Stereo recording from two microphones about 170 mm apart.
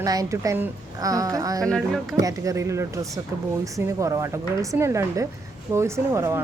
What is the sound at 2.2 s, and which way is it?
Speech, 20° right (ahead or behind).